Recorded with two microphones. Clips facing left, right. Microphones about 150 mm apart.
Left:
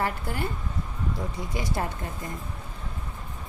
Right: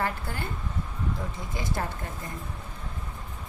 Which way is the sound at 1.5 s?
15° left (ahead or behind).